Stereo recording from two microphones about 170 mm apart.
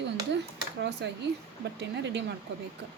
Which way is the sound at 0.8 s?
90° right.